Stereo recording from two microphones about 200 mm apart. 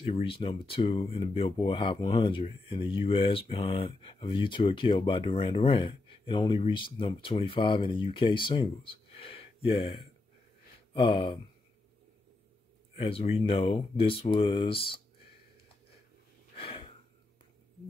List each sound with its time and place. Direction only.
0.0 s speech: 30° left (ahead or behind)
12.9 s speech: 30° left (ahead or behind)
16.5 s a sound: 30° left (ahead or behind)